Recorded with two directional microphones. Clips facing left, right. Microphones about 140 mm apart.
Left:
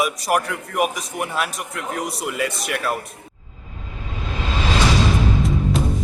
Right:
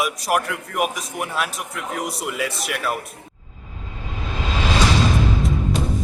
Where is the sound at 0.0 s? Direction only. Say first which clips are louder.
Left 1 dB; centre (ahead or behind).